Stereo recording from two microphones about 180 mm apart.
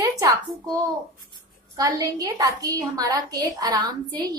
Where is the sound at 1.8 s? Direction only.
20° right (ahead or behind).